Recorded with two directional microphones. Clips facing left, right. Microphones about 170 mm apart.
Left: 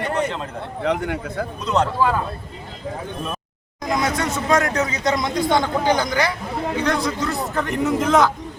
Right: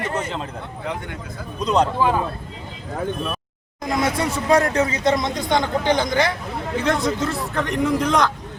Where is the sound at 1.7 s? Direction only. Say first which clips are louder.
Right 1 dB; 15° right (ahead or behind).